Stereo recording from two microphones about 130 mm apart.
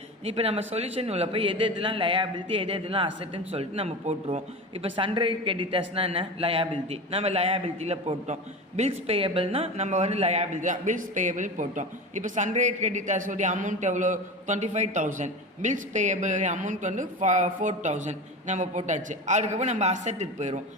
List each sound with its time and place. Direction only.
0.3 s a man's voice: 50° right (ahead or behind)
4.8 s speech: 40° right (ahead or behind); by 20.6 s 65° right (ahead or behind)